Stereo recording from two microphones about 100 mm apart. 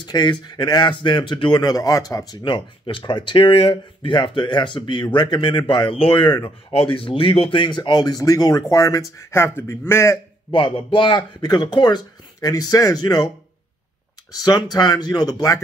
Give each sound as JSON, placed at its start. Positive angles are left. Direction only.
{"t": 0.0, "sound": "speech", "side_deg": 45}
{"t": 6.2, "sound": "speech", "side_deg": 50}
{"t": 6.7, "sound": "speech", "side_deg": 70}
{"t": 10.5, "sound": "speech", "side_deg": 60}
{"t": 14.3, "sound": "speech", "side_deg": 40}